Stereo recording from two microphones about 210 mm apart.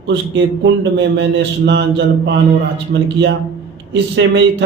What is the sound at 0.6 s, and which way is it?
Speech, 60° right (ahead or behind).